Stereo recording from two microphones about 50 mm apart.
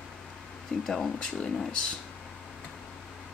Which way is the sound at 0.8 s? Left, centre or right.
Centre.